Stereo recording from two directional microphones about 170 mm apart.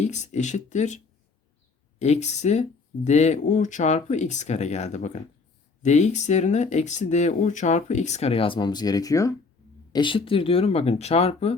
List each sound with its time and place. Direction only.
0.0 s speech: 45° left (ahead or behind)